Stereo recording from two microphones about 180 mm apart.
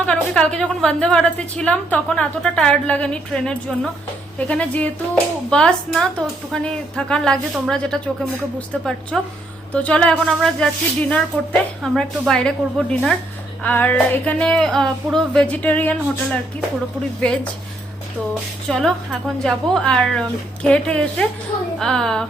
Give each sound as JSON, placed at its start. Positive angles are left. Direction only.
{"t": 0.0, "sound": "a woman's voice", "side_deg": 5}
{"t": 4.4, "sound": "music", "side_deg": 5}
{"t": 5.5, "sound": "a woman's voice", "side_deg": 5}
{"t": 11.3, "sound": "music", "side_deg": 10}
{"t": 11.8, "sound": "a woman's voice", "side_deg": 0}
{"t": 13.7, "sound": "music", "side_deg": 10}
{"t": 18.7, "sound": "a woman's voice", "side_deg": 0}